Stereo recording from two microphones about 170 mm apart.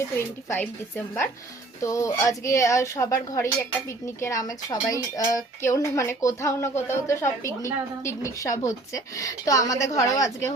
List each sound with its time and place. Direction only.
0.2 s a woman's voice: 15° left (ahead or behind)